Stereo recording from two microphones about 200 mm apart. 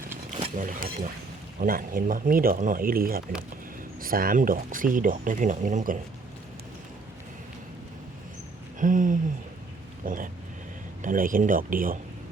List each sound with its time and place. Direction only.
0.5 s speech: 40° right (ahead or behind)
8.8 s speech: 40° right (ahead or behind)